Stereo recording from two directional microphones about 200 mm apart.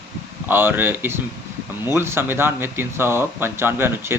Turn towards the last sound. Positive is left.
turn(degrees=-10)  # may be behind; listen again after turning